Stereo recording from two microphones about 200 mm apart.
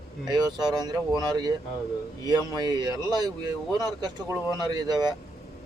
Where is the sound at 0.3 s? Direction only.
20° right (ahead or behind).